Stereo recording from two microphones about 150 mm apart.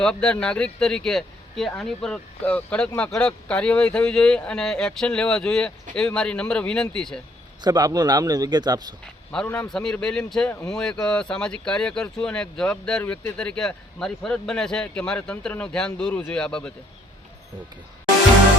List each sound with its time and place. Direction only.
0.0 s speech: 5° left (ahead or behind)
7.6 s a man's voice: 25° right (ahead or behind)
9.5 s speech: 5° left (ahead or behind)